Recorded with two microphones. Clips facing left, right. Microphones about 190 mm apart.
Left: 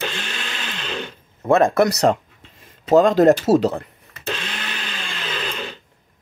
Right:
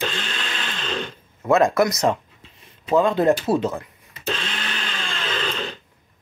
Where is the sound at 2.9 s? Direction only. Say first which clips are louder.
Left 5 dB; 80° left.